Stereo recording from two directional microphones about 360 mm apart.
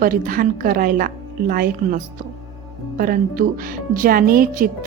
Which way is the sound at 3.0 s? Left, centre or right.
Right.